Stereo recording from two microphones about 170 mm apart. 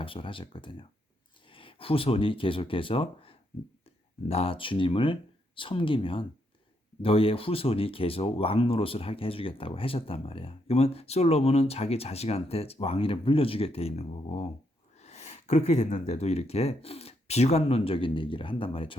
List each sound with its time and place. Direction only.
0.0 s speech: 30° left (ahead or behind)